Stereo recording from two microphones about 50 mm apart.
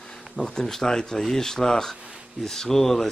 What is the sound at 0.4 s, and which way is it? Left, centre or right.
Speech, centre.